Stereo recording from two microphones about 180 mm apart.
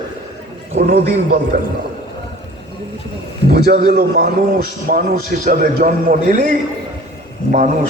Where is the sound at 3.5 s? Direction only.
60° right (ahead or behind).